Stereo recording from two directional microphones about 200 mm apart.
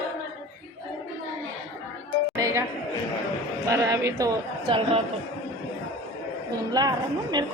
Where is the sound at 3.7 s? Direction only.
20° right (ahead or behind).